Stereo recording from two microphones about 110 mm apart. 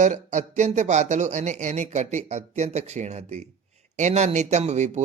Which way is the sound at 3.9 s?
90° right.